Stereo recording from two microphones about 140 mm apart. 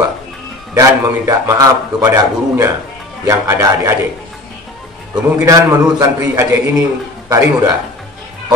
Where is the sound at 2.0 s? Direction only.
15° right (ahead or behind).